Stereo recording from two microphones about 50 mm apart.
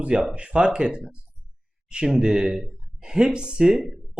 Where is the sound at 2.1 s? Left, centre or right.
Centre.